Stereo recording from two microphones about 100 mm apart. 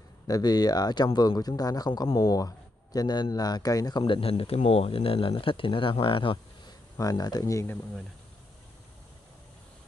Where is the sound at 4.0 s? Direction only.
65° left (ahead or behind); by 7.6 s 35° left (ahead or behind).